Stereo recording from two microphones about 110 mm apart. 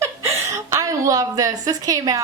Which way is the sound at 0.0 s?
25° right (ahead or behind).